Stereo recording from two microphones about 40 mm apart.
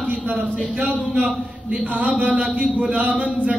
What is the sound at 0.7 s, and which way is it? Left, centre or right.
A man's voice, right.